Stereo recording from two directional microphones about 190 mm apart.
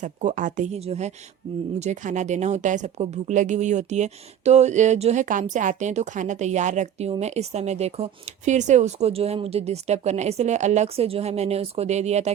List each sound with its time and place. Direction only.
0.0 s speech: 40° right (ahead or behind)